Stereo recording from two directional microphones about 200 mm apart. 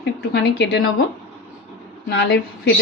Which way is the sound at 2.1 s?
60° left (ahead or behind).